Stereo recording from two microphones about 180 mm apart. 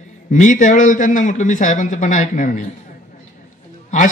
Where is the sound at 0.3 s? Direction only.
45° left (ahead or behind).